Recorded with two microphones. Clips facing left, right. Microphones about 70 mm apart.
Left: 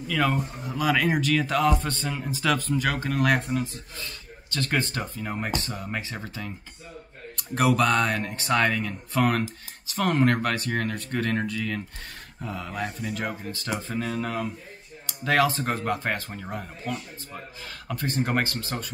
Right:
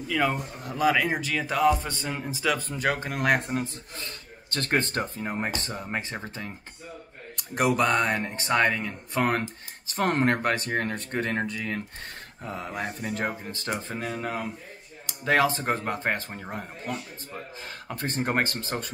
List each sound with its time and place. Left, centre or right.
0.1 s speech: centre; by 5.2 s right
5.2 s speech: right
7.5 s speech: right
9.8 s speech: right
14.0 s speech: centre
17.9 s speech: right